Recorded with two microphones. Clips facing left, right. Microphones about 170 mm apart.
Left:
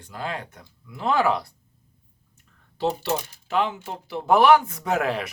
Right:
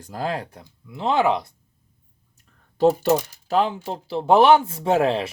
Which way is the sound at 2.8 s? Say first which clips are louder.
Right 8 dB; 40° right (ahead or behind).